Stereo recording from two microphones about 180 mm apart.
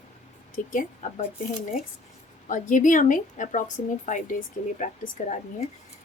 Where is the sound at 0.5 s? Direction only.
45° left (ahead or behind).